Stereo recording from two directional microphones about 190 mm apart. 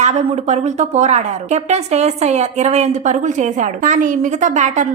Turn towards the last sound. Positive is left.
turn(degrees=-40)  # may be behind; listen again after turning